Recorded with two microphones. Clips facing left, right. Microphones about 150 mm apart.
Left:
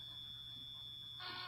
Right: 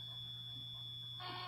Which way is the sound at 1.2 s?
50° right (ahead or behind).